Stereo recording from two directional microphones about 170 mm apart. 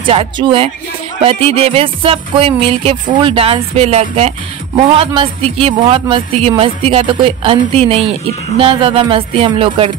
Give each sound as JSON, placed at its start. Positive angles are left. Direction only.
{"t": 0.0, "sound": "a man's voice", "side_deg": -30}